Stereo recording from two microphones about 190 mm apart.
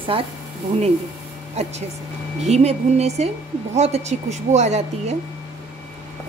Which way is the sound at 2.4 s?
35° right (ahead or behind).